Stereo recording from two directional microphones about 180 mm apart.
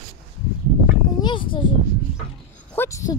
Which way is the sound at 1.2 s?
25° left (ahead or behind).